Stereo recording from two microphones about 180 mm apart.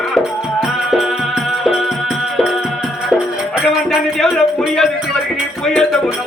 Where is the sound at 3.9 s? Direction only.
Centre (ahead or behind).